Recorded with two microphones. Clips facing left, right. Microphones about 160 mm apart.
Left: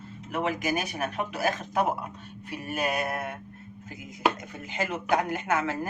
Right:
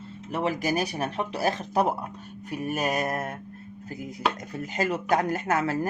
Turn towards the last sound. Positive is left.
turn(degrees=-40)  # may be behind; listen again after turning